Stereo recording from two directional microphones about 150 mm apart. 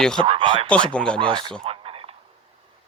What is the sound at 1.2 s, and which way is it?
Speech, 35° right (ahead or behind).